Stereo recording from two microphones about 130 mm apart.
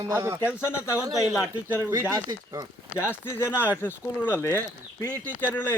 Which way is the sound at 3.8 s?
15° left (ahead or behind).